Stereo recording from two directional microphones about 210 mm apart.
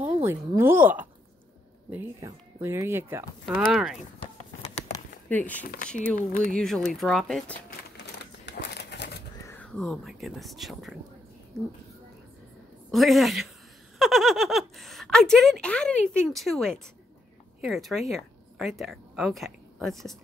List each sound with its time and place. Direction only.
0.0 s speech: 10° right (ahead or behind)
4.9 s a sound: 10° left (ahead or behind)
6.5 s speech: centre (ahead or behind)
8.5 s a sound: 55° left (ahead or behind)
9.5 s speech: 5° left (ahead or behind)
12.9 s speech: centre (ahead or behind)